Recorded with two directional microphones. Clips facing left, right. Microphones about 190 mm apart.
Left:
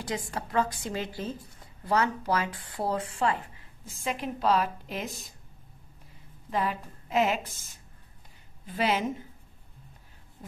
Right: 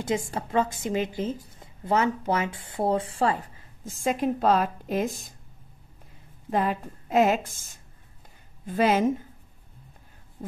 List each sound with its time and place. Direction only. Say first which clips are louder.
0.0 s a woman's voice: right 6 dB; 25° right (ahead or behind)
3.8 s a woman's voice: right 7 dB; 45° right (ahead or behind)
6.5 s a woman's voice: right 4 dB; 50° right (ahead or behind)